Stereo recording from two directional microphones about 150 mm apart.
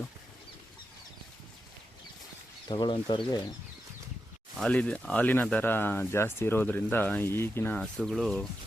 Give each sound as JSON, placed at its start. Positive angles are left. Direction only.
{"t": 2.6, "sound": "speech", "side_deg": 30}
{"t": 4.5, "sound": "speech", "side_deg": 5}